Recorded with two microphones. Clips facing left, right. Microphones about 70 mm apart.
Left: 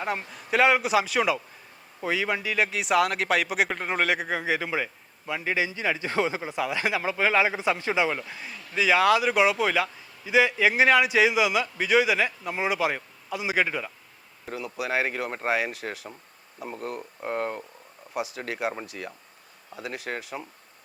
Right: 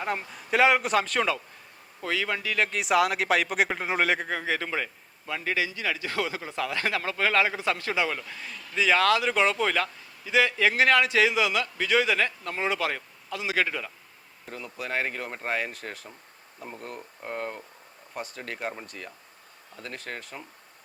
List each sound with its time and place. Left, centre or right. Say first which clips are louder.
0.0 s speech: left 1 dB; centre
4.2 s a man's voice: left 2 dB; centre